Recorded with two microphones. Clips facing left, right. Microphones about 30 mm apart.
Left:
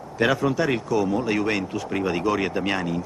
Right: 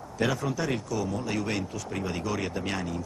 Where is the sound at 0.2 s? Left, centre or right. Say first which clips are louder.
Left 7 dB; left.